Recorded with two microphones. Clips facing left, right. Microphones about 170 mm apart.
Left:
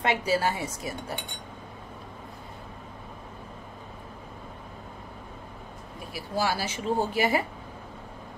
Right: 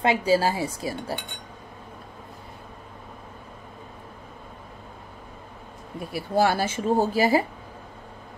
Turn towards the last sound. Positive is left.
turn(degrees=-35)  # may be behind; listen again after turning